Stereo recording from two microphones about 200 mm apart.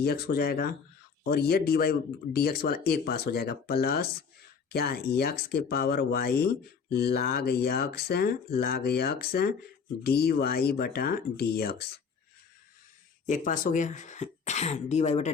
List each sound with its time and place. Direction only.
0.0 s speech: 50° left (ahead or behind)
13.2 s speech: 40° left (ahead or behind)